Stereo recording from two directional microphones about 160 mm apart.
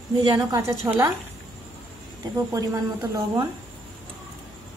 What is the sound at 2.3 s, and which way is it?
Speech, 20° right (ahead or behind).